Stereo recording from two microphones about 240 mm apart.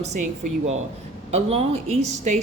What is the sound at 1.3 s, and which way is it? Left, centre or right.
A woman's voice, right.